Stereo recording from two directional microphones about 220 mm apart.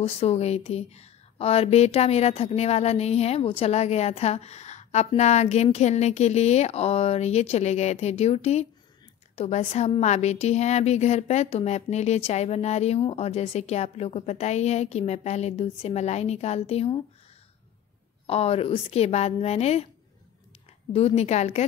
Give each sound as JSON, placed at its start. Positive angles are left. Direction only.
{"t": 0.0, "sound": "speech", "side_deg": 30}
{"t": 18.2, "sound": "speech", "side_deg": 25}
{"t": 20.9, "sound": "speech", "side_deg": 30}